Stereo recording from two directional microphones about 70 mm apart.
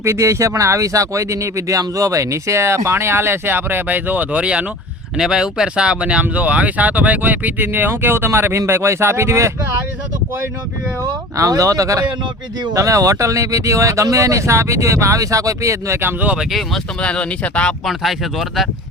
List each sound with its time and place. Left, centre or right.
0.0 s speech: right
11.3 s speech: right
16.0 s speech: right
16.5 s speech: centre
17.0 s speech: centre
17.8 s speech: centre